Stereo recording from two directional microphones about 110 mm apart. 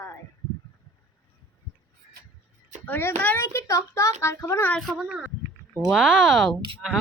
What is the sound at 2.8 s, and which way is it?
Speech, 20° left (ahead or behind).